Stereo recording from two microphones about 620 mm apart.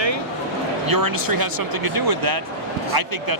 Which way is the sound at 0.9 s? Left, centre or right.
Right.